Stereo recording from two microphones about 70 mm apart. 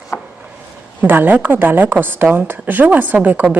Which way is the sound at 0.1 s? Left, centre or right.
Left.